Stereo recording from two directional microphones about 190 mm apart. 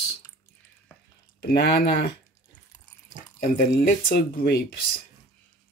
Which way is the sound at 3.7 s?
55° left (ahead or behind).